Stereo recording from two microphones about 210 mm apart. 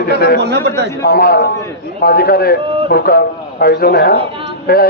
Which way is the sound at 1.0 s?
45° left (ahead or behind).